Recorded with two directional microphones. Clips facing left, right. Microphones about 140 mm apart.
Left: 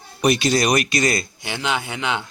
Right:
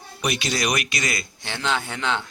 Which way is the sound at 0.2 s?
40° left (ahead or behind).